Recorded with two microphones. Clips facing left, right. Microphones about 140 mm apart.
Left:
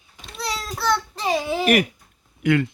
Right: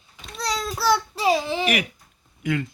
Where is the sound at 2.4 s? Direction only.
70° left (ahead or behind).